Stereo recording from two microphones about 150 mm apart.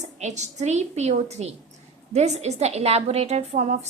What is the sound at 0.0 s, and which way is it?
A woman's voice, 50° right (ahead or behind).